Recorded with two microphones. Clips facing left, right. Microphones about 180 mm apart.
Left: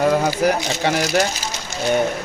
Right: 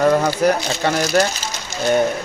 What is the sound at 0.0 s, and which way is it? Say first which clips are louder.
Speech: right 2 dB; 10° left (ahead or behind).